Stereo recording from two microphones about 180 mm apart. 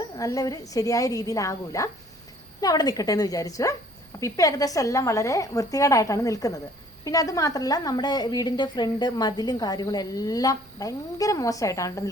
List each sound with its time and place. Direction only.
0.2 s a woman's voice: 20° left (ahead or behind)